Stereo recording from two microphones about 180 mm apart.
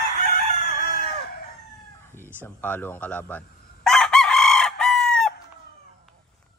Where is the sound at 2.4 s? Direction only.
10° left (ahead or behind).